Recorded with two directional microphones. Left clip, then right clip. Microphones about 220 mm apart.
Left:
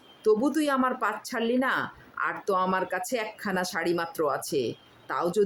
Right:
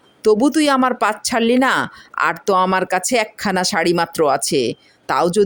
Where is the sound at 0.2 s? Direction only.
40° right (ahead or behind).